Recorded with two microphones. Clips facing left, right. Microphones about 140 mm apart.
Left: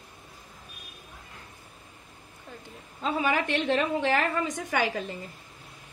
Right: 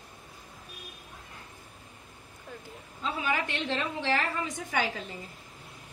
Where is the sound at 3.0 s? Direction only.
55° left (ahead or behind).